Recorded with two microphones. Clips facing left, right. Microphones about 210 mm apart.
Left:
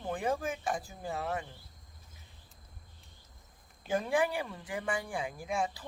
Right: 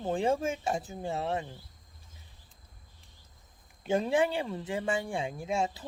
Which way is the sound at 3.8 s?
25° right (ahead or behind).